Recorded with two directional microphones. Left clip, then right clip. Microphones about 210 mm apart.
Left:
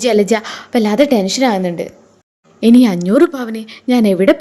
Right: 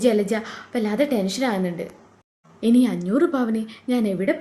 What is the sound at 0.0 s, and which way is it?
A woman's voice, 40° left (ahead or behind).